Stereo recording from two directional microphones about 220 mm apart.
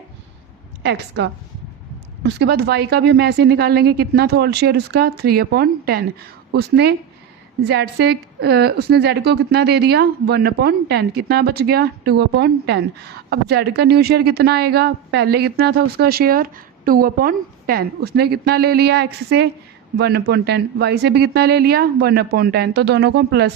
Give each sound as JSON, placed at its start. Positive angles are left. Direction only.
{"t": 0.8, "sound": "speech", "side_deg": -50}